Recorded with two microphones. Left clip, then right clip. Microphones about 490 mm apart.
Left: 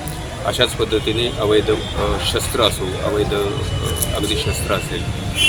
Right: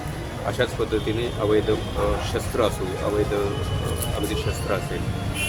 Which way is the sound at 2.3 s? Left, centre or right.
Right.